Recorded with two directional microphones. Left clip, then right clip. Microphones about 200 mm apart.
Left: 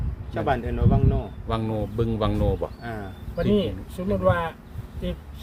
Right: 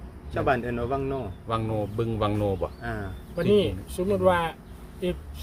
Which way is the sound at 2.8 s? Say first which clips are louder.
Right 1 dB; 10° right (ahead or behind).